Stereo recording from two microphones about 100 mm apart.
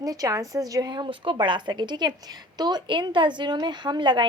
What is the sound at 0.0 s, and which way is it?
A woman's voice, 35° right (ahead or behind).